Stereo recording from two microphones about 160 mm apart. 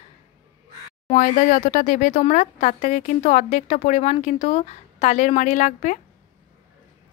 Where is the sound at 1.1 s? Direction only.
50° left (ahead or behind).